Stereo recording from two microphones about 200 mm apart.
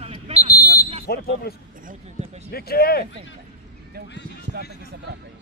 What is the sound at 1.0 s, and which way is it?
Speech, 55° left (ahead or behind).